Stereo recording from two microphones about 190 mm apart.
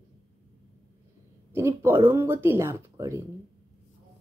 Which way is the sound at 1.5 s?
15° right (ahead or behind).